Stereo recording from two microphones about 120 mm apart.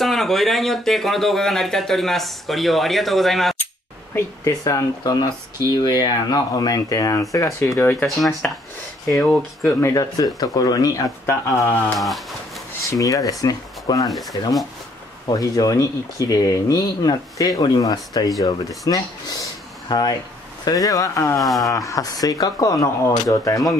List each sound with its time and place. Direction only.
0.0 s speech: centre (ahead or behind)
4.5 s speech: 30° left (ahead or behind)
8.2 s speech: centre (ahead or behind)
9.6 s speech: 20° left (ahead or behind)
12.0 s speech: centre (ahead or behind)
12.9 s speech: 30° left (ahead or behind)
15.2 s speech: 30° left (ahead or behind)
21.4 s speech: centre (ahead or behind)
21.7 s speech: 30° left (ahead or behind)